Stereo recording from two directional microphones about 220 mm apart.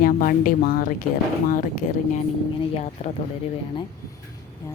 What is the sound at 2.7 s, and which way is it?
Speech, 30° left (ahead or behind).